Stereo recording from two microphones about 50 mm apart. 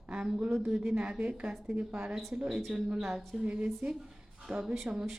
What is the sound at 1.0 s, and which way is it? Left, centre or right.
Speech, right.